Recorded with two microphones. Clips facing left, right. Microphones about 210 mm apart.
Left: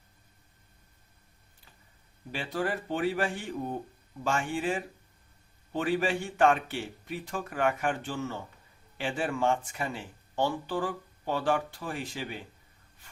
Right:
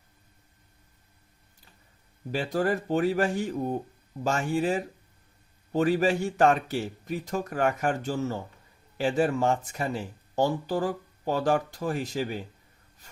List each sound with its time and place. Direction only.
2.3 s speech: 40° right (ahead or behind)